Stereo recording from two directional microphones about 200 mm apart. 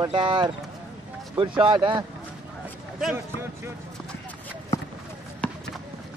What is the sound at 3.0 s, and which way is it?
Speech, 10° right (ahead or behind).